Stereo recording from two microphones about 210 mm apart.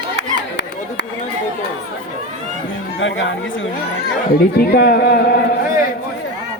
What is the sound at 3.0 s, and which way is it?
Speech, 65° left (ahead or behind).